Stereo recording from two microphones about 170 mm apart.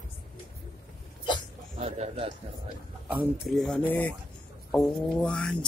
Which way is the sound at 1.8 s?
35° right (ahead or behind).